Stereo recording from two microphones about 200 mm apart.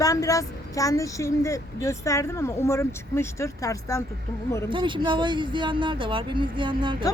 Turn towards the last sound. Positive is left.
turn(degrees=-25)  # may be behind; listen again after turning